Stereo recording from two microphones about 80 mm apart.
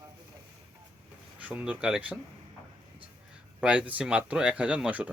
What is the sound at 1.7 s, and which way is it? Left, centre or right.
Speech, centre.